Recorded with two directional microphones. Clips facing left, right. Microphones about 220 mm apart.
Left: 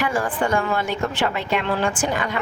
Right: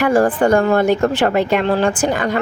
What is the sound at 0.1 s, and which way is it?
Speech, 40° right (ahead or behind).